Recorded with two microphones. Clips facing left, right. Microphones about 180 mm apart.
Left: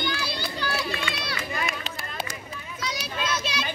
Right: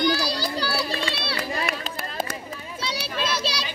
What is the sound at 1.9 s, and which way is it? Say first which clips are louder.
Run: right 4 dB; 55° right (ahead or behind).